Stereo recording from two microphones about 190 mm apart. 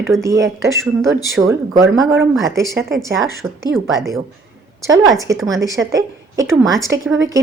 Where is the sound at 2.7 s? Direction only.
65° right (ahead or behind).